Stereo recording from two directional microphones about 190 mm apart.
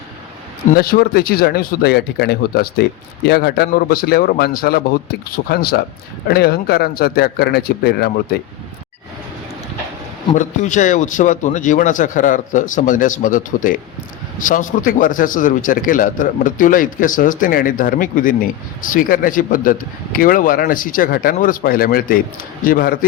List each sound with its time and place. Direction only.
0.7 s a man's voice: 50° left (ahead or behind)
10.3 s a man's voice: 40° left (ahead or behind)